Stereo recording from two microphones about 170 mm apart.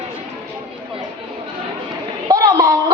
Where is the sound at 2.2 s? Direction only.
20° right (ahead or behind).